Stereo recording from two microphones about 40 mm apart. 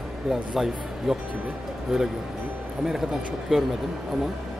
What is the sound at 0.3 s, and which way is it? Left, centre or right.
Speech, centre.